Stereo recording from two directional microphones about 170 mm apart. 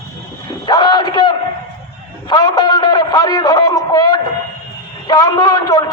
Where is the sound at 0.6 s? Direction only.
25° left (ahead or behind).